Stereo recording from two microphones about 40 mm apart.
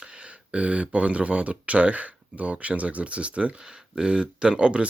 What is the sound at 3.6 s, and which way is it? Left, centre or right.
Speech, centre.